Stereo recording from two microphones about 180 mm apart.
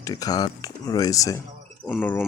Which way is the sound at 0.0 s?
20° left (ahead or behind).